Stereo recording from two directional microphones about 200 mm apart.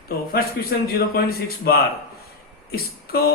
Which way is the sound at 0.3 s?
50° left (ahead or behind).